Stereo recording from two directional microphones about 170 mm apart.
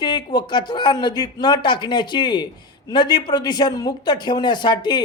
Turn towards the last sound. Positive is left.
turn(degrees=25)  # may be behind; listen again after turning